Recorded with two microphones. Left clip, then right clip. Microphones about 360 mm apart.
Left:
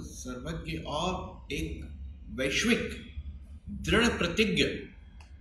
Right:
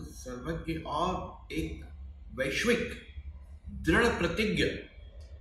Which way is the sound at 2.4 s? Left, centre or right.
Right.